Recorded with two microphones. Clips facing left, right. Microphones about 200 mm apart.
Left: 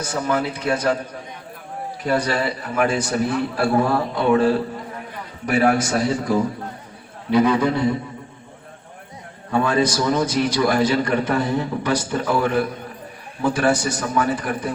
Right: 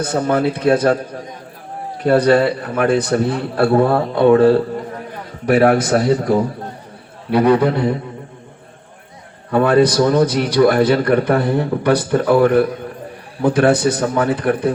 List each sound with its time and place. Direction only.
0.0 s a man's voice: 55° right (ahead or behind)
2.0 s a man's voice: 60° right (ahead or behind)
9.5 s a man's voice: 60° right (ahead or behind)